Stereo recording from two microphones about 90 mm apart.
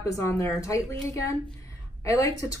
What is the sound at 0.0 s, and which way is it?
Speech, 35° left (ahead or behind).